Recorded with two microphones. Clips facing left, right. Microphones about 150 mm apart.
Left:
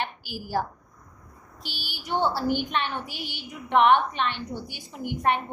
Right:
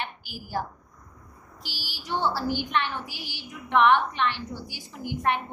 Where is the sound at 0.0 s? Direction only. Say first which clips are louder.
Left 4 dB; 30° left (ahead or behind).